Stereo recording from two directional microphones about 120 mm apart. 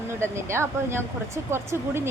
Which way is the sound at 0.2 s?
20° right (ahead or behind).